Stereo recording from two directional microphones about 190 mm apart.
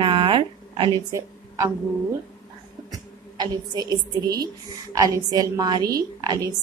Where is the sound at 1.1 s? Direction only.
15° right (ahead or behind).